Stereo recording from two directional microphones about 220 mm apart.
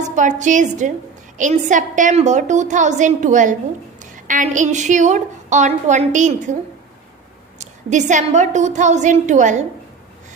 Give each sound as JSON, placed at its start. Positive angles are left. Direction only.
{"t": 0.2, "sound": "a woman's voice", "side_deg": -35}
{"t": 7.6, "sound": "a woman's voice", "side_deg": -35}